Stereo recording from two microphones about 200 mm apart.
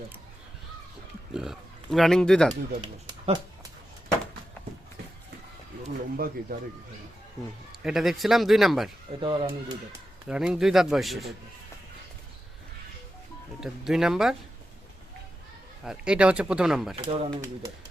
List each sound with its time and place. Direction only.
1.3 s speech: centre (ahead or behind)
2.5 s speech: 20° right (ahead or behind)
6.1 s speech: 45° right (ahead or behind)
7.7 s a man's voice: centre (ahead or behind)
9.2 s speech: 25° right (ahead or behind)
10.2 s a man's voice: 5° right (ahead or behind)
13.6 s a man's voice: centre (ahead or behind)
15.8 s a man's voice: 5° right (ahead or behind)
16.9 s speech: 25° right (ahead or behind)